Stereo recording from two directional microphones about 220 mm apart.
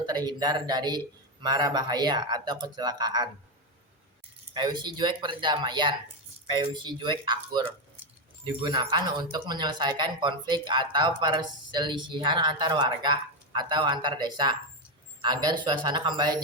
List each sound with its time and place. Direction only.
0.0 s speech: 20° right (ahead or behind)
4.5 s speech: 20° right (ahead or behind)